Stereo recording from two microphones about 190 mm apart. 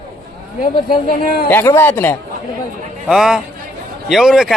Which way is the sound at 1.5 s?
10° left (ahead or behind).